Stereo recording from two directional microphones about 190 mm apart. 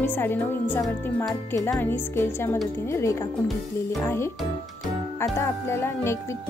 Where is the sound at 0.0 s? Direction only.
10° left (ahead or behind).